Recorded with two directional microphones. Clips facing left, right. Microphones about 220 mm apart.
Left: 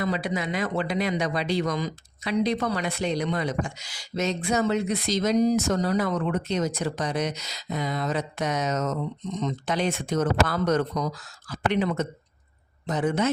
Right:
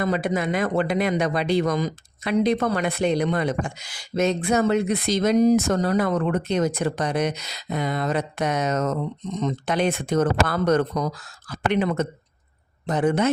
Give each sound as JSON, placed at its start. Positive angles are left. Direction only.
{"t": 0.0, "sound": "speech", "side_deg": -50}